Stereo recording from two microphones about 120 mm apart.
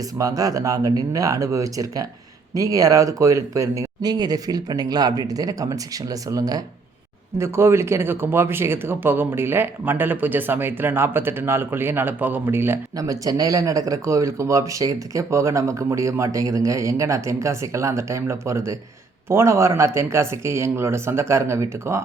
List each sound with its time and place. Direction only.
0.2 s speech: 30° right (ahead or behind)
13.0 s speech: 30° right (ahead or behind)